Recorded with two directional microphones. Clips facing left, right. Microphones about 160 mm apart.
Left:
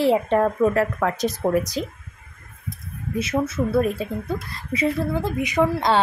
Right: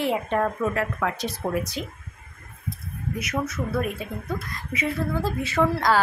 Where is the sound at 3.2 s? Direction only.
30° left (ahead or behind).